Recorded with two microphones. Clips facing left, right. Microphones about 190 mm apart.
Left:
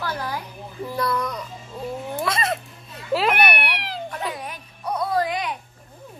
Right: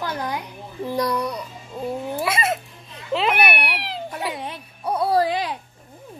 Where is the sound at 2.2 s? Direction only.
5° right (ahead or behind).